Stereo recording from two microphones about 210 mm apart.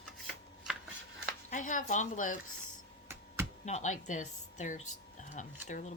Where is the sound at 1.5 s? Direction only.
35° left (ahead or behind).